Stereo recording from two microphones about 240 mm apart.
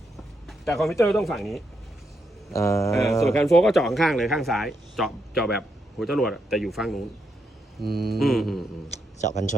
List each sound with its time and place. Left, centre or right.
0.4 s a sound: centre
1.0 s speech: centre
2.5 s speech: centre
2.9 s speech: centre
7.9 s mantra: right
8.2 s speech: centre
9.3 s a man's voice: left